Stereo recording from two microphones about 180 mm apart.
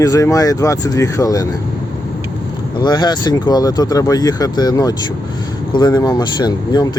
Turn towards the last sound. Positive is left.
turn(degrees=20)  # may be behind; listen again after turning